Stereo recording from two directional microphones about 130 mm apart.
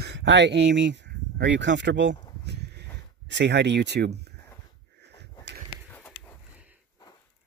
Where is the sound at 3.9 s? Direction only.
90° right.